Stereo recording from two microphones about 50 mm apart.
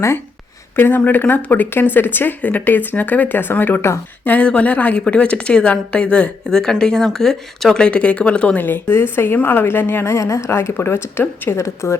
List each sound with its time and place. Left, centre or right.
0.8 s speech: left
3.8 s speech: left
4.2 s a woman's voice: left; by 7.9 s centre
7.9 s a woman's voice: left
8.5 s a woman's voice: left
11.4 s speech: left